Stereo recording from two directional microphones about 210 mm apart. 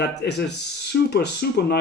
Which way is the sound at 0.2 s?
55° left (ahead or behind).